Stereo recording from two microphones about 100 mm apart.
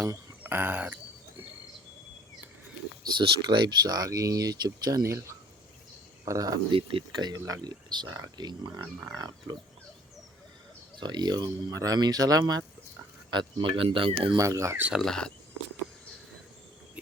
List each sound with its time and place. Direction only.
0.0 s speech: 20° right (ahead or behind)
3.0 s speech: 50° right (ahead or behind)
5.0 s speech: 30° right (ahead or behind)
6.7 s speech: 65° right (ahead or behind)
7.2 s speech: 40° right (ahead or behind)
11.0 s speech: 45° right (ahead or behind)
13.3 s speech: 60° right (ahead or behind)
14.3 s speech: 30° right (ahead or behind)
14.9 s speech: 5° left (ahead or behind)